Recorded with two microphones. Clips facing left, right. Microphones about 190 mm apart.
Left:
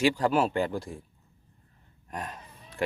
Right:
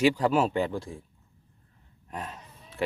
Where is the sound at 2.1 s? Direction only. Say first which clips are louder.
Even; centre (ahead or behind).